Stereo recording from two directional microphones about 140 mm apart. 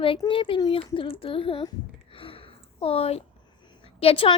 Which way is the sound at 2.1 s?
40° left (ahead or behind).